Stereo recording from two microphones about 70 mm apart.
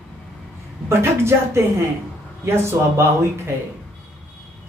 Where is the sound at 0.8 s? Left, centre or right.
Right.